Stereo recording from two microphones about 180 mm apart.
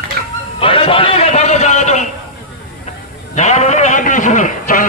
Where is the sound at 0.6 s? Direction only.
30° left (ahead or behind).